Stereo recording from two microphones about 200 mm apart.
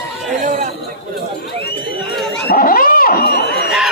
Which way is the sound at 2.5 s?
45° left (ahead or behind).